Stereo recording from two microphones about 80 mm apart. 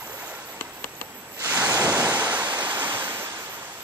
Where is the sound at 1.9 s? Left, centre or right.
Centre.